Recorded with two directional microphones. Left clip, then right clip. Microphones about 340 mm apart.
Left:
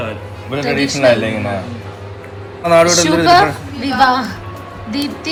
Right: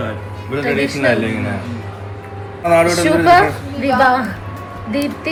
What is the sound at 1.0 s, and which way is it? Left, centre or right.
Speech, left.